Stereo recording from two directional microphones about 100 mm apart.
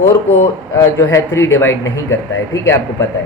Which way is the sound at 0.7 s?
30° left (ahead or behind).